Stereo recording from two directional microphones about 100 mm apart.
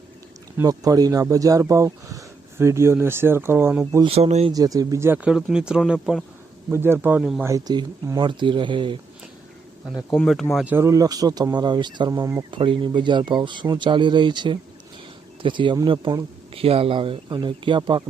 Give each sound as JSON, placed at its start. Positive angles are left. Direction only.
{"t": 0.6, "sound": "speech", "side_deg": -40}
{"t": 4.0, "sound": "speech", "side_deg": -90}
{"t": 4.5, "sound": "speech", "side_deg": -40}
{"t": 5.0, "sound": "speech", "side_deg": -15}
{"t": 6.7, "sound": "speech", "side_deg": -25}
{"t": 7.2, "sound": "speech", "side_deg": -5}
{"t": 7.7, "sound": "speech", "side_deg": -45}
{"t": 10.1, "sound": "speech", "side_deg": 0}
{"t": 10.7, "sound": "speech", "side_deg": -30}
{"t": 12.5, "sound": "speech", "side_deg": -60}
{"t": 16.6, "sound": "speech", "side_deg": -75}